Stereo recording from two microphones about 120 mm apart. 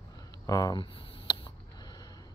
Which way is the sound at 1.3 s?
40° left (ahead or behind).